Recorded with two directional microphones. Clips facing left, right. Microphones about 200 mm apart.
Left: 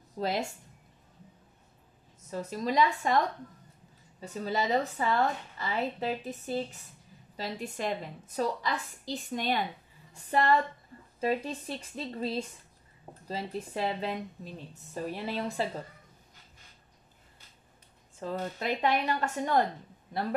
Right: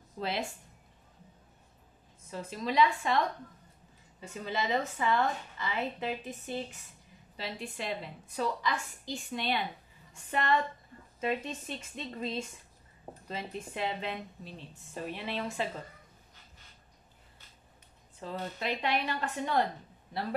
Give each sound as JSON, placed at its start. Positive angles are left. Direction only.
{"t": 0.2, "sound": "a woman's voice", "side_deg": 40}
{"t": 2.3, "sound": "a woman's voice", "side_deg": 40}
{"t": 18.2, "sound": "a woman's voice", "side_deg": 45}